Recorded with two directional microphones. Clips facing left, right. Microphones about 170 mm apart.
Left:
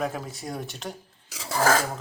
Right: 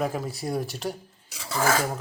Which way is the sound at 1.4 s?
40° left (ahead or behind).